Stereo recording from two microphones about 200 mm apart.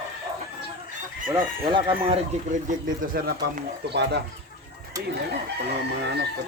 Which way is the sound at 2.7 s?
45° right (ahead or behind).